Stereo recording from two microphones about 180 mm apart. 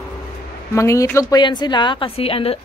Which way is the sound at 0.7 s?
15° left (ahead or behind).